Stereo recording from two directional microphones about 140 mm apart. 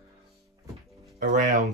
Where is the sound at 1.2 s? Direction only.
65° right (ahead or behind).